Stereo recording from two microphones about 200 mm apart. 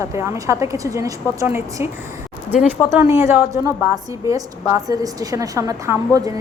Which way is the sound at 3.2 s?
15° right (ahead or behind).